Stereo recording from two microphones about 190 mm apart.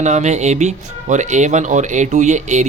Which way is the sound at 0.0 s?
40° right (ahead or behind).